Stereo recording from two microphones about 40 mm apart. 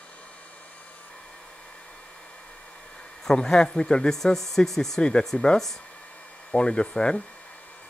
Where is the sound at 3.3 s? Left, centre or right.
Centre.